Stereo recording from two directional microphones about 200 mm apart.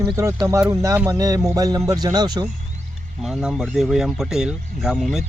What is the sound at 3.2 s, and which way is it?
Speech, centre (ahead or behind).